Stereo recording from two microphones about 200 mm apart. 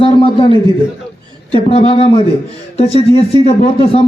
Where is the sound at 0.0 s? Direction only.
25° left (ahead or behind).